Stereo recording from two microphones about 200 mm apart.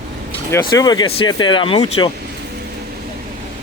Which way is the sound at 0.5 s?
20° left (ahead or behind).